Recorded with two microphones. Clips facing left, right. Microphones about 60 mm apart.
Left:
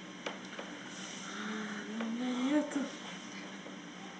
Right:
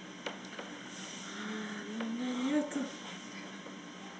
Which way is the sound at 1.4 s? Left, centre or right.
Centre.